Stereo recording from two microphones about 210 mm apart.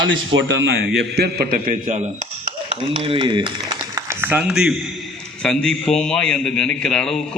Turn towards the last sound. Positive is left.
turn(degrees=5)  # may be behind; listen again after turning